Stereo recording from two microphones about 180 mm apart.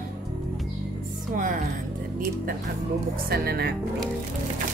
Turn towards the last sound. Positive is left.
turn(degrees=-60)  # may be behind; listen again after turning